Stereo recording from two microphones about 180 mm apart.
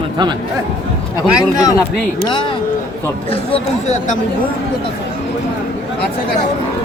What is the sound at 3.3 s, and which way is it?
Speech, 35° left (ahead or behind).